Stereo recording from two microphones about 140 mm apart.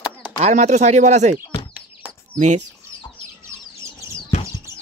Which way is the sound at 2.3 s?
60° right (ahead or behind).